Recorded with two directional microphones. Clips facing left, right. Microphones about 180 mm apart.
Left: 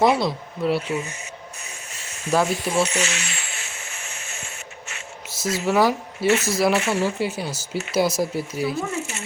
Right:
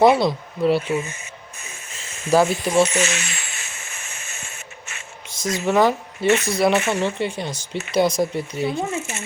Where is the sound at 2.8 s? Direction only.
45° right (ahead or behind).